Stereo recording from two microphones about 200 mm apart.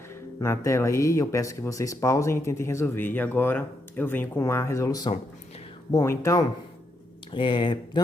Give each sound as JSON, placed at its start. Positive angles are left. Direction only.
{"t": 0.3, "sound": "speech", "side_deg": 15}